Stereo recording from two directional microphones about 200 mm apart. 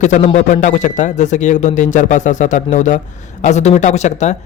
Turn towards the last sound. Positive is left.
turn(degrees=35)  # may be behind; listen again after turning